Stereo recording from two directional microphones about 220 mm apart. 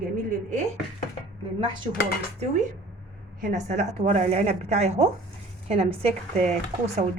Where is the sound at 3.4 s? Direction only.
35° right (ahead or behind).